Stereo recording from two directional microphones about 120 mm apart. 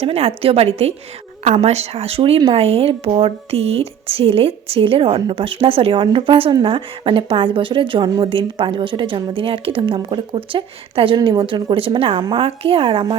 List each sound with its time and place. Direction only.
0.0 s a woman's voice: 55° right (ahead or behind)